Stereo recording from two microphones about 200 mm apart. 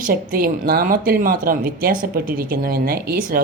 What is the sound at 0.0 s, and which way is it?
Speech, 45° right (ahead or behind).